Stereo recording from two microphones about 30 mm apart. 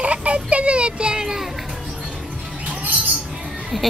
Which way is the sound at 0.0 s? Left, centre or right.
Right.